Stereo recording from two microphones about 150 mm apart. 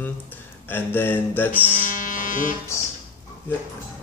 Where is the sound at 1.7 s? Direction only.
60° left (ahead or behind).